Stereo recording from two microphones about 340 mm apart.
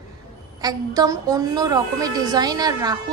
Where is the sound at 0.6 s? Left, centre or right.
Centre.